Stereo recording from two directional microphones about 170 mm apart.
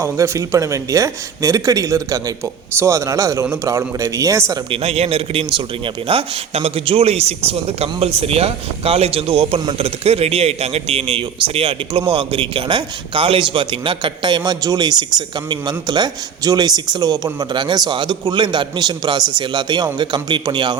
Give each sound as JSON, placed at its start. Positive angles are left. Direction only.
{"t": 0.0, "sound": "a man's voice", "side_deg": -15}
{"t": 4.7, "sound": "a man's voice", "side_deg": -35}